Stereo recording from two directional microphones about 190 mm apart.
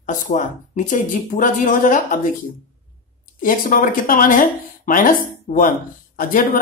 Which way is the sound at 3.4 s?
45° left (ahead or behind).